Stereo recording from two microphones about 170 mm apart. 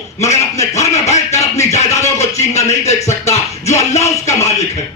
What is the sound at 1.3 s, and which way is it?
A man's voice, 40° left (ahead or behind).